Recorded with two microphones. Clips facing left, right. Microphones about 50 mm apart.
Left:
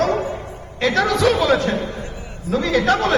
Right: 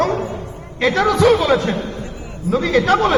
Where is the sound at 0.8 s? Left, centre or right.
Centre.